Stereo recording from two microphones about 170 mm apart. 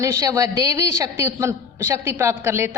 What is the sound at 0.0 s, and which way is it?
A woman's voice, 20° right (ahead or behind).